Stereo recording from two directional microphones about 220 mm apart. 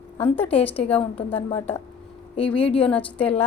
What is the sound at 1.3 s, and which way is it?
Speech, 25° left (ahead or behind).